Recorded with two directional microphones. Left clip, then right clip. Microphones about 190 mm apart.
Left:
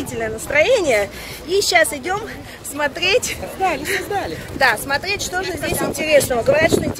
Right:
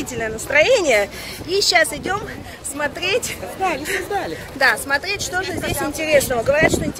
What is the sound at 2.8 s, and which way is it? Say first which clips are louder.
Speech: left 3 dB; 40° left (ahead or behind).